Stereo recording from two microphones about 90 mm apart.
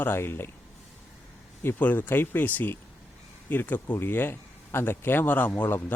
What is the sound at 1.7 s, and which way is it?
Speech, 20° left (ahead or behind).